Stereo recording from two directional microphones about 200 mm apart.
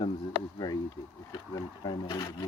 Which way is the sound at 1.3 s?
20° left (ahead or behind).